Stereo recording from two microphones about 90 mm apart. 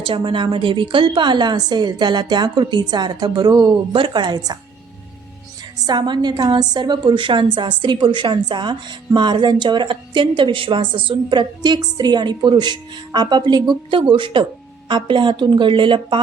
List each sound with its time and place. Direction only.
0.0 s a woman's voice: 70° right (ahead or behind); by 4.5 s 50° right (ahead or behind)
5.8 s a woman's voice: 55° right (ahead or behind)